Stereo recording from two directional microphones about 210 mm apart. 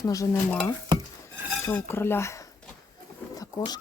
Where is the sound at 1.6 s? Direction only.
10° left (ahead or behind).